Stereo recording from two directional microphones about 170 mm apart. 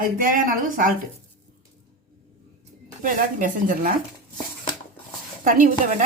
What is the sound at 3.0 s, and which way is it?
Speech, 55° right (ahead or behind).